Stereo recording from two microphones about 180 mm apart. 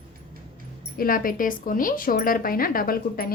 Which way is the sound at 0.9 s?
55° left (ahead or behind).